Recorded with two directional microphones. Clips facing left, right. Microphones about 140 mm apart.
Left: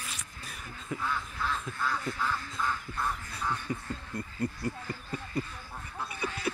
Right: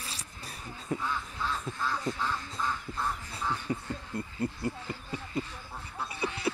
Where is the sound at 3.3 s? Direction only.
25° right (ahead or behind).